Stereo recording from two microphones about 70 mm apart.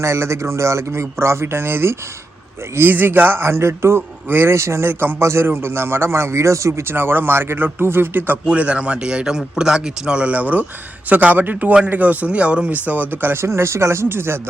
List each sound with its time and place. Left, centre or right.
0.0 s speech: right